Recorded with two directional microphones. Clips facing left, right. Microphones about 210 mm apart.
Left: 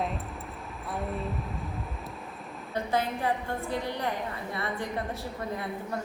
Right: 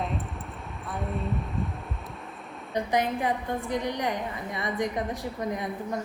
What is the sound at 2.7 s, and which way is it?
A woman's voice, 15° right (ahead or behind).